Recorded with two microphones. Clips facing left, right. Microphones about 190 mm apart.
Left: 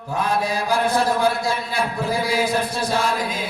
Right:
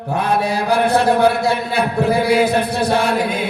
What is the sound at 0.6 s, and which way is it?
Chant, 65° right (ahead or behind).